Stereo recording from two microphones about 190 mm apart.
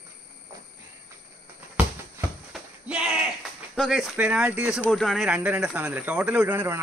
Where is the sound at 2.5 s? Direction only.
5° right (ahead or behind).